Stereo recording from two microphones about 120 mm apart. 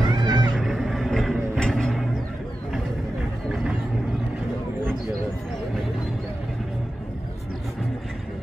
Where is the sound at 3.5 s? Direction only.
5° right (ahead or behind).